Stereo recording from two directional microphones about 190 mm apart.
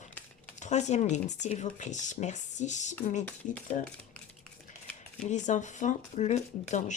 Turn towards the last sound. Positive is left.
turn(degrees=40)  # may be behind; listen again after turning